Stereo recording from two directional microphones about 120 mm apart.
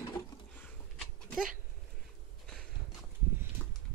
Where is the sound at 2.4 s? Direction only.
5° left (ahead or behind).